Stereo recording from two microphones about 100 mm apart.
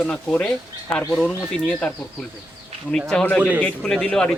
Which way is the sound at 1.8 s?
5° left (ahead or behind).